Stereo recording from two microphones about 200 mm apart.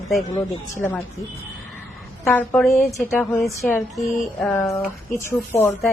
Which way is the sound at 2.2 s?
10° left (ahead or behind).